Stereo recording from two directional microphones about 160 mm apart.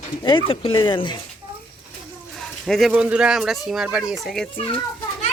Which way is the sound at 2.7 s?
Centre (ahead or behind).